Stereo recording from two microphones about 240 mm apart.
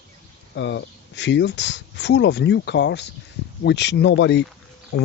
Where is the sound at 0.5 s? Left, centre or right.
Left.